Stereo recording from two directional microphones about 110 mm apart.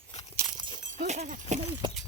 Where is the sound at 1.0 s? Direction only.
90° right.